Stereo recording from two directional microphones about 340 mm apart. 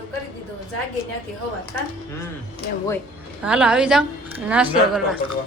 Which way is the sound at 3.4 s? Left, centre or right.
Centre.